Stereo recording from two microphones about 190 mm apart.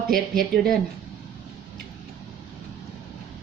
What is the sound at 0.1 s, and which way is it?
Speech, centre (ahead or behind).